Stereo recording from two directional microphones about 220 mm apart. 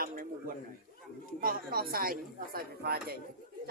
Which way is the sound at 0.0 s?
40° right (ahead or behind).